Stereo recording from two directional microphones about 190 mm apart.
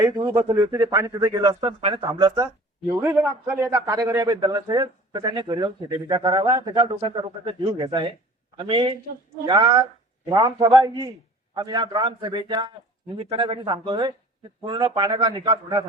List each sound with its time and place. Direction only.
0.0 s a man's voice: 20° right (ahead or behind)